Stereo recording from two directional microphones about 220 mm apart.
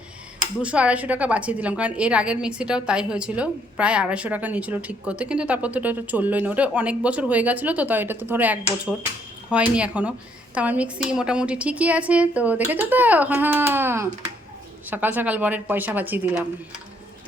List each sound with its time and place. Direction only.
0.6 s a woman's voice: 5° right (ahead or behind)